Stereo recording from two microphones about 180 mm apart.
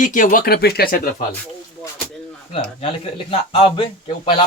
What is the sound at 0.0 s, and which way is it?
Speech, 50° left (ahead or behind).